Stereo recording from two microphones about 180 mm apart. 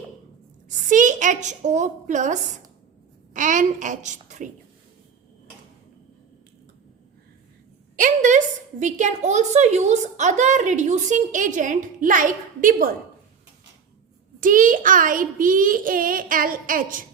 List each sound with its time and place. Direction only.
0.9 s a woman's voice: 45° right (ahead or behind)
7.9 s a woman's voice: 45° right (ahead or behind)
14.4 s a woman's voice: 50° right (ahead or behind)